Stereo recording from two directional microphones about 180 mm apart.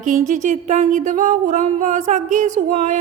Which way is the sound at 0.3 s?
45° right (ahead or behind).